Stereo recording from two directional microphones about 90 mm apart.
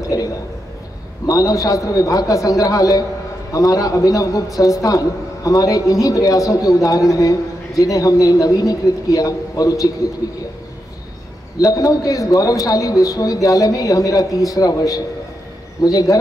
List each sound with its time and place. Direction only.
0.1 s a man's voice: 45° left (ahead or behind)
11.6 s a man's voice: 40° left (ahead or behind)